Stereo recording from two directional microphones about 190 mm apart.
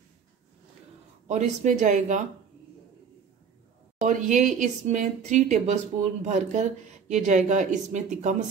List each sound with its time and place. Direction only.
1.2 s speech: 40° right (ahead or behind)
4.0 s speech: 40° right (ahead or behind)